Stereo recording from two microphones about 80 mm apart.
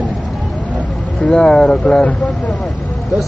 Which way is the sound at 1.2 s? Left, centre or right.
Centre.